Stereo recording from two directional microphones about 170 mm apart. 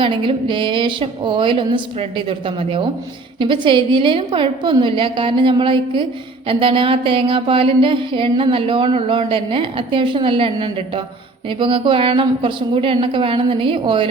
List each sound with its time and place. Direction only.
0.0 s a woman's voice: 30° right (ahead or behind)
6.5 s a sound: 30° right (ahead or behind)
11.4 s a woman's voice: 30° right (ahead or behind)